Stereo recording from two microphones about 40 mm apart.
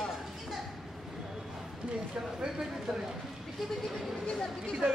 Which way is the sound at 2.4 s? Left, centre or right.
Centre.